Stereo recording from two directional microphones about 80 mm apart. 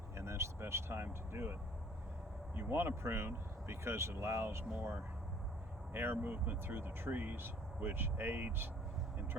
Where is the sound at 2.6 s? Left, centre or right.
Right.